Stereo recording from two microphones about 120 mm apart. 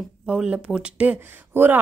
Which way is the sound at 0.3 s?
5° right (ahead or behind).